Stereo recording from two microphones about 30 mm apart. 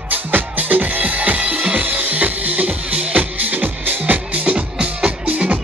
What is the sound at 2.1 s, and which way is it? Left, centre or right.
Music, right.